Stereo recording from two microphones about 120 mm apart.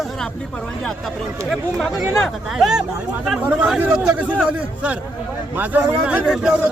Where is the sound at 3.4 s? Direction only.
10° right (ahead or behind).